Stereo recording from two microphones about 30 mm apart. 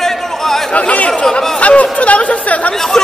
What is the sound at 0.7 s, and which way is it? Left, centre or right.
Chatter, left.